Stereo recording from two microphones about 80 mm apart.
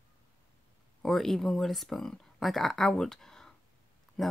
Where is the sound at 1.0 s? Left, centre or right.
Centre.